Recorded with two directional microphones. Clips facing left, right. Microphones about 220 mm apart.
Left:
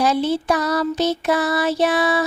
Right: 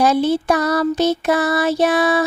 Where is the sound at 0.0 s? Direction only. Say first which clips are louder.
Right 3 dB; 50° right (ahead or behind).